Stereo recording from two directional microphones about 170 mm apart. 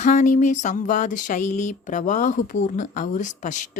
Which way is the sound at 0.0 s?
45° left (ahead or behind).